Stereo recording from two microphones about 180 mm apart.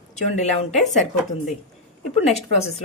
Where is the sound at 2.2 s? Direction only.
35° left (ahead or behind).